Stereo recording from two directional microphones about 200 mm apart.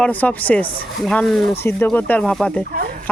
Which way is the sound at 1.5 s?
10° left (ahead or behind).